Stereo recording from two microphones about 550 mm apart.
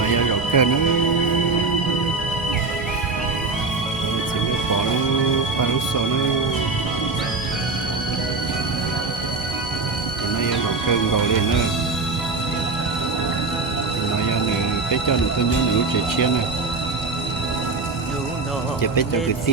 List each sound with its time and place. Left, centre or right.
0.0 s music: left